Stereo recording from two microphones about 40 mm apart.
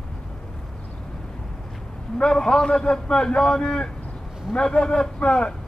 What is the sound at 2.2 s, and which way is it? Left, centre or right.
A man's voice, centre.